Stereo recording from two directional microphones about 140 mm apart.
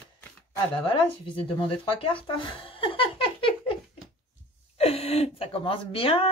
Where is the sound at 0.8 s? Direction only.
35° left (ahead or behind).